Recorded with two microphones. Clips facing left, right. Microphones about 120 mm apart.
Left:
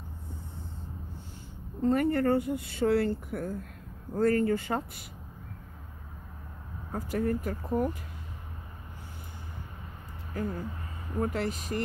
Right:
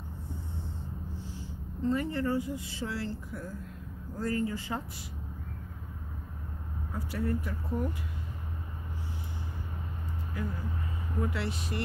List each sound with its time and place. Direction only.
1.8 s speech: 55° left (ahead or behind)
6.9 s speech: 45° left (ahead or behind)
10.4 s speech: 45° left (ahead or behind)